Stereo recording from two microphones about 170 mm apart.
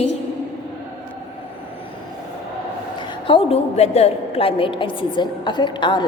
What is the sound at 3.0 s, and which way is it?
A woman's voice, 30° left (ahead or behind).